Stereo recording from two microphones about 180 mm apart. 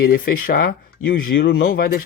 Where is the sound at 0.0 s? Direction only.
55° left (ahead or behind).